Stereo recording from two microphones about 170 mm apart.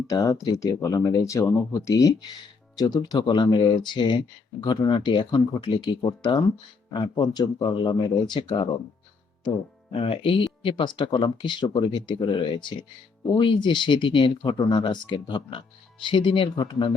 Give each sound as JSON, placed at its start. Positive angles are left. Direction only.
{"t": 0.1, "sound": "speech", "side_deg": 20}
{"t": 9.9, "sound": "speech", "side_deg": 35}